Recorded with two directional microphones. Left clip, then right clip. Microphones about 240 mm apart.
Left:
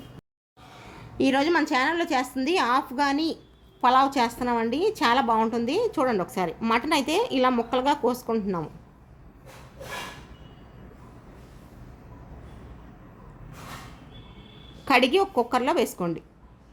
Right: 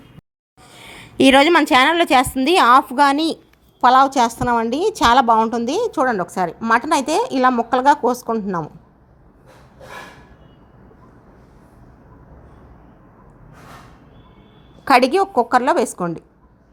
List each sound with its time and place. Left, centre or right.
0.8 s a woman's voice: right; by 8.7 s centre
14.8 s a woman's voice: right